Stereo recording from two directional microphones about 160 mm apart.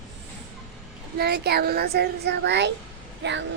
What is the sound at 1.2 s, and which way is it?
A child's voice, 85° right.